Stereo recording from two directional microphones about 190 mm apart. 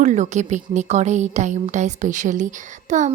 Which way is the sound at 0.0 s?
40° right (ahead or behind).